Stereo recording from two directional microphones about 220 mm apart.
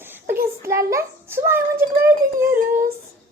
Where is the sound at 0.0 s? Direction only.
10° right (ahead or behind).